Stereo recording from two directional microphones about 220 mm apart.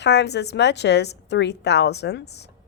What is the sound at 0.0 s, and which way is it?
A woman's voice, 50° left (ahead or behind).